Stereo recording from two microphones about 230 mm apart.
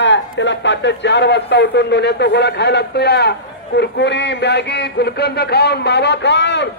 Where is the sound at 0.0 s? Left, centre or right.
Left.